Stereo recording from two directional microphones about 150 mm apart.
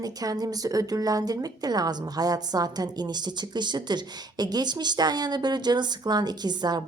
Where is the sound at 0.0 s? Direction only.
25° right (ahead or behind).